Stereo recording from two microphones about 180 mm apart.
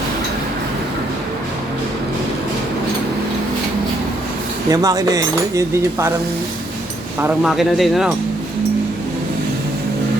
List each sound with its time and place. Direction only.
4.7 s speech: 20° right (ahead or behind)
7.2 s speech: 5° right (ahead or behind)